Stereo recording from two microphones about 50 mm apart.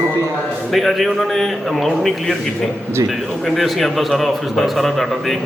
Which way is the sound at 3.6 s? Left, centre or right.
Centre.